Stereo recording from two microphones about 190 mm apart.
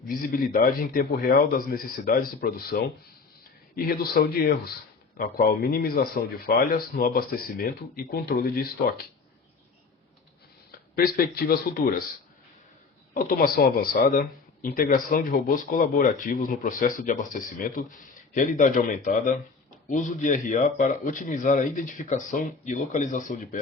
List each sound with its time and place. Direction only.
0.1 s speech: 50° left (ahead or behind)
10.7 s speech: 50° left (ahead or behind)
13.1 s speech: 50° left (ahead or behind)